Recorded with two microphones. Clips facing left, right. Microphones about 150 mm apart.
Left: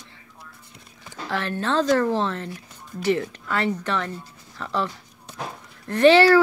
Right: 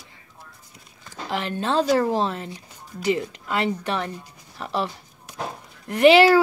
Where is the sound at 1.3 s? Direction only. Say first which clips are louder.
Even; 15° right (ahead or behind).